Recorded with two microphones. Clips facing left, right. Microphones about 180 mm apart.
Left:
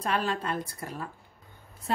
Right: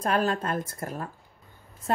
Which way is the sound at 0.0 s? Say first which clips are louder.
Right 4 dB; 45° right (ahead or behind).